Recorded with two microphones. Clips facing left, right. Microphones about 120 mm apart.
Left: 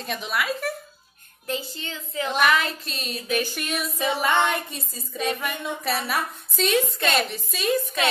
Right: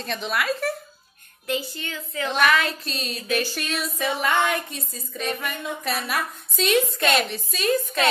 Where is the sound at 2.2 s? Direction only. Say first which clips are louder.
Right 1 dB; 5° left (ahead or behind).